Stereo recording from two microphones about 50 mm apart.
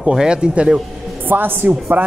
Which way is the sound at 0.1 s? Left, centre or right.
Centre.